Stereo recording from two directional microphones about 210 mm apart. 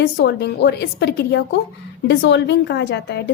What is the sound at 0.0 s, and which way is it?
Speech, 55° left (ahead or behind).